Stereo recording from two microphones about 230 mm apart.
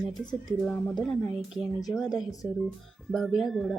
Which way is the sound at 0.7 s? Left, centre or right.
Centre.